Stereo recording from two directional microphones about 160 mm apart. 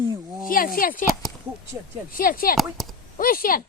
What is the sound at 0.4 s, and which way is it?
Speech, 60° left (ahead or behind).